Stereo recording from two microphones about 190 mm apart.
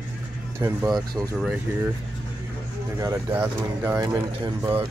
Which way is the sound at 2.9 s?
15° right (ahead or behind).